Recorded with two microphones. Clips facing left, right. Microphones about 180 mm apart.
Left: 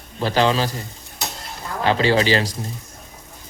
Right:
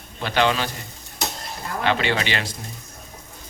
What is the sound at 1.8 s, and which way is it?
Speech, 35° left (ahead or behind).